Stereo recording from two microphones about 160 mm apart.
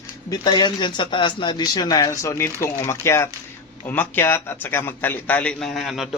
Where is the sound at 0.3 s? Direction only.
25° left (ahead or behind).